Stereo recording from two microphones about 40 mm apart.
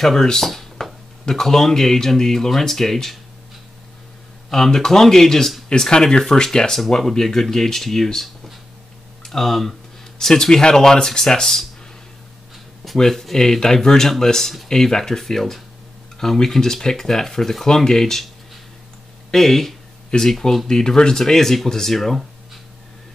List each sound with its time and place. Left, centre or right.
0.0 s speech: centre
0.5 s a sound: centre
1.2 s speech: centre
4.5 s speech: centre
12.8 s speech: centre
19.3 s speech: centre